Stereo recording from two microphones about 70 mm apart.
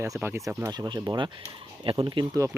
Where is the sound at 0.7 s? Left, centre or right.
Right.